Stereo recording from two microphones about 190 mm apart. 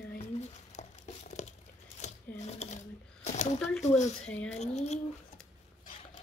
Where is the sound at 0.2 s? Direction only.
35° left (ahead or behind).